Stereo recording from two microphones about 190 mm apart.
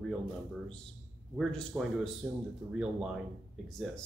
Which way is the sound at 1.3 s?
Centre (ahead or behind).